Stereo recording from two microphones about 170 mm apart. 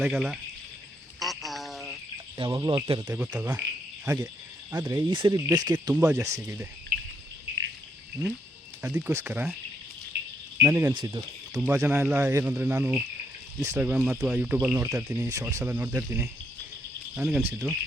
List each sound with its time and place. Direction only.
0.0 s speech: centre (ahead or behind)
1.2 s a sound: centre (ahead or behind)
2.4 s speech: 30° right (ahead or behind)
3.4 s insect: 10° right (ahead or behind)
4.7 s speech: 15° right (ahead or behind)
5.1 s speech: 30° right (ahead or behind)
6.9 s cricket: 65° right (ahead or behind)
8.8 s speech: 15° right (ahead or behind)
10.1 s a sound: 80° right
10.6 s speech: 10° right (ahead or behind)
10.9 s speech: 25° right (ahead or behind); by 15.2 s 5° right (ahead or behind)
15.2 s speech: 15° right (ahead or behind)
17.2 s speech: 5° right (ahead or behind)